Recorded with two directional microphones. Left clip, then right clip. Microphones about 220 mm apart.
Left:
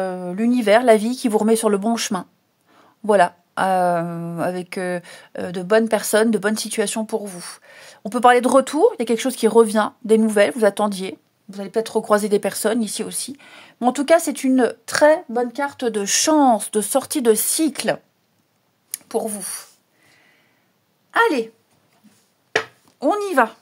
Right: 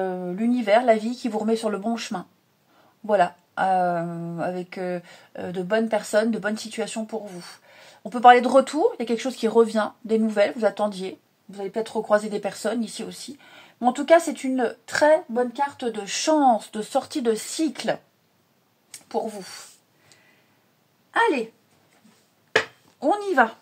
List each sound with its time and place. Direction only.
0.0 s speech: 55° left (ahead or behind)
21.1 s a woman's voice: 55° left (ahead or behind)
22.9 s speech: 50° left (ahead or behind)